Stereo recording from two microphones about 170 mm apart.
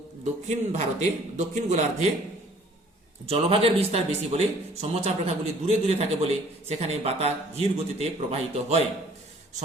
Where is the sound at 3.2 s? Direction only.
35° right (ahead or behind).